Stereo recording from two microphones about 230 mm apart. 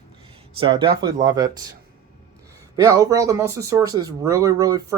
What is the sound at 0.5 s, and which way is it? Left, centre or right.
Speech, right.